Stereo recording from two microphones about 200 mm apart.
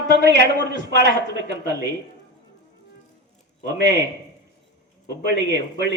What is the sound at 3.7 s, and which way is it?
Speech, 60° right (ahead or behind).